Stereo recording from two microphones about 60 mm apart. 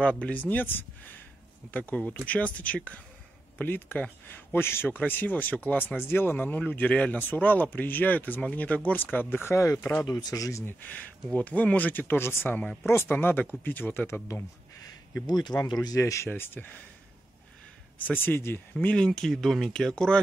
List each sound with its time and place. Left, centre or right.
0.0 s speech: centre
4.3 s a man's voice: left
4.9 s speech: left
9.5 s speech: left
10.1 s speech: left
10.6 s a man's voice: left
13.1 s speech: left
15.5 s speech: left
16.3 s speech: left
18.2 s speech: left
18.9 s speech: centre
19.3 s speech: centre